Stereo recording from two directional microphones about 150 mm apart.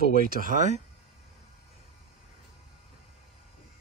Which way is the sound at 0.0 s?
70° right (ahead or behind).